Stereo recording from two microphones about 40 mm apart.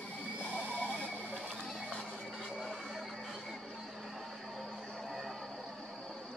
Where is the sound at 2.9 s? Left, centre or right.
Centre.